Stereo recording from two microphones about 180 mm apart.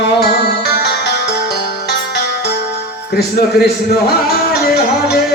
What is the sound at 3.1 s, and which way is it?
Music, 60° left (ahead or behind).